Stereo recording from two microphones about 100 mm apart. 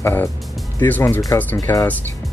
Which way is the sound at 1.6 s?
35° left (ahead or behind).